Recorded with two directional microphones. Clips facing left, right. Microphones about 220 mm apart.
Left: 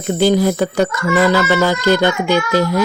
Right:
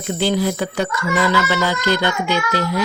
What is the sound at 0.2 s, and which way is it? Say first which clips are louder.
Music: left 6 dB; 45° left (ahead or behind).